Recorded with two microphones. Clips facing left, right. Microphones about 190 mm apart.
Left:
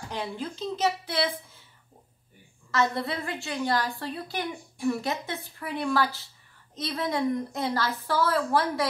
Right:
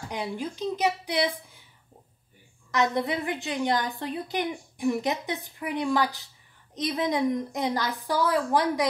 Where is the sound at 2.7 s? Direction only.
15° right (ahead or behind).